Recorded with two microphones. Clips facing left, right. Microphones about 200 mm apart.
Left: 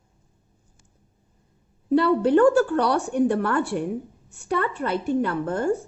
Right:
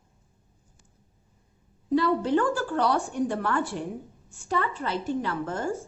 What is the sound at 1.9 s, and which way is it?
A woman's voice, 65° left (ahead or behind).